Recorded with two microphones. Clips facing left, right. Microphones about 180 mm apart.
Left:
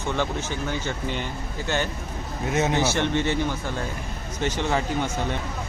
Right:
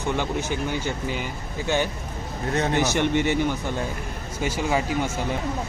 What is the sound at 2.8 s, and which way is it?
Speech, 15° right (ahead or behind).